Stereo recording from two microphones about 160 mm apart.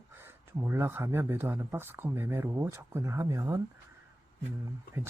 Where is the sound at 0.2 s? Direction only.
15° right (ahead or behind).